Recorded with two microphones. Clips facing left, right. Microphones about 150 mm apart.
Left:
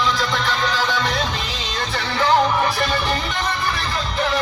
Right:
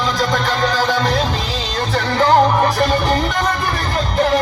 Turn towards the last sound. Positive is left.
turn(degrees=-45)  # may be behind; listen again after turning